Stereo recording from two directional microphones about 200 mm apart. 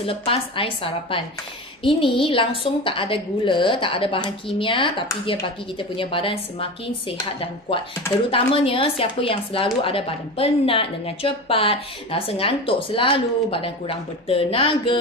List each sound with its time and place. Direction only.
0.0 s speech: 30° left (ahead or behind)